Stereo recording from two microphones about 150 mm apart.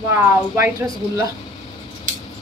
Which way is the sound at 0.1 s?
15° right (ahead or behind).